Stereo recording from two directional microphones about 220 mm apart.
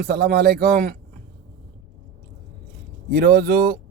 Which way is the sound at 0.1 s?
45° right (ahead or behind).